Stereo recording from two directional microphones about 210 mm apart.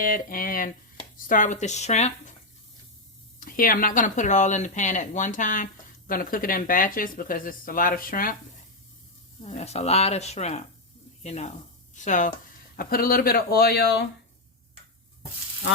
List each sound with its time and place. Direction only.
0.0 s speech: 40° left (ahead or behind)
3.4 s speech: 40° left (ahead or behind)
9.4 s speech: 30° left (ahead or behind); by 14.1 s 50° left (ahead or behind)